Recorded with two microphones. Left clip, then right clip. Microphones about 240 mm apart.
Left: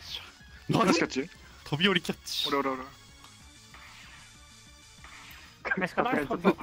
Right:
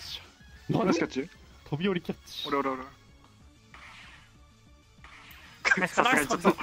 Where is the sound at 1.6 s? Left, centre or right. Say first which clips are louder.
Left 5 dB; left.